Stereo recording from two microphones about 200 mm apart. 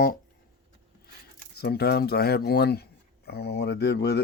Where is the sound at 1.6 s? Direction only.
55° left (ahead or behind).